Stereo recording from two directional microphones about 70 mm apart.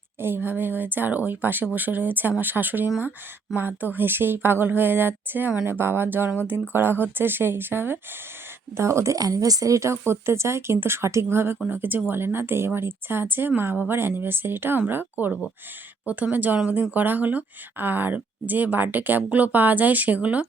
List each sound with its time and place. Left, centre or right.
0.2 s a woman's voice: right
9.1 s a woman's voice: right